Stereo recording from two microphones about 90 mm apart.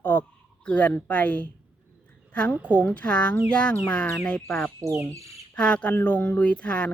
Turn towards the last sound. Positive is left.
turn(degrees=15)  # may be behind; listen again after turning